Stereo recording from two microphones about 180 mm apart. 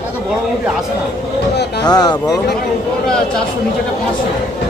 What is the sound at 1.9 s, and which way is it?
Speech, 25° left (ahead or behind).